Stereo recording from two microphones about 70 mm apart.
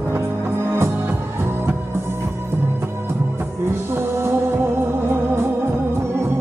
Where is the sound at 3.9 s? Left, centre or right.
Right.